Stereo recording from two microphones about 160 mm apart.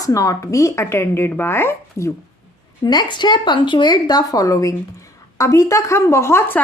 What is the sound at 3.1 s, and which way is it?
A woman's voice, 30° left (ahead or behind).